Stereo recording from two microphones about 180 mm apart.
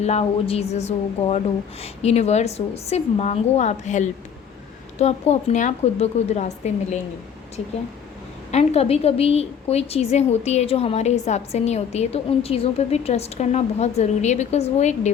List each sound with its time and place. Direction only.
0.0 s a woman's voice: 35° left (ahead or behind)
8.5 s a woman's voice: 35° left (ahead or behind)